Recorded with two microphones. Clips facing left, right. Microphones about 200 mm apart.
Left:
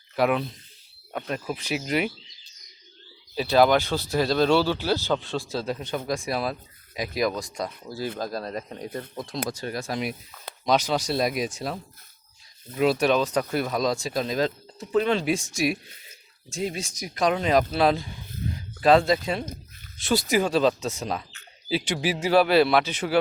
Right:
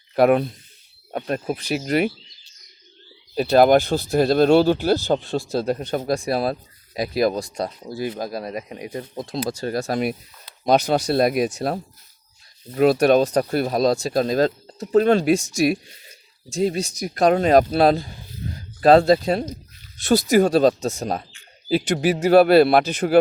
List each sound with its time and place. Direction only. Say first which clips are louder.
0.2 s speech: right 7 dB; 50° right (ahead or behind)
1.5 s speech: right 5 dB; 40° right (ahead or behind)
3.3 s speech: right 5 dB; 50° right (ahead or behind)
6.1 s speech: right 6 dB; 35° right (ahead or behind)
8.0 s speech: right 3 dB; 10° right (ahead or behind)
9.1 s speech: right 7 dB; 25° right (ahead or behind); by 11.7 s 60° right (ahead or behind)
12.7 s speech: right 6 dB; 50° right (ahead or behind)